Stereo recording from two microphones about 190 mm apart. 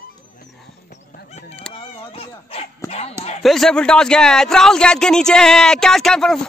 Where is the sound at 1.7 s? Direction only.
30° left (ahead or behind).